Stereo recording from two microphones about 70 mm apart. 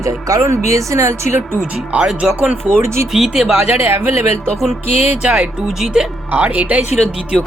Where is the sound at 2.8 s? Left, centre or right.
Right.